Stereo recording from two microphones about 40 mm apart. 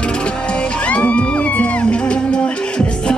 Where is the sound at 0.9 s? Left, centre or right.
Left.